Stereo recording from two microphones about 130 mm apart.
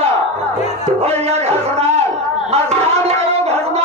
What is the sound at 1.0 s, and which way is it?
Music, 50° right (ahead or behind).